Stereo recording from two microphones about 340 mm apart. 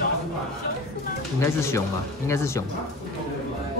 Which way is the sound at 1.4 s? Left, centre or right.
Centre.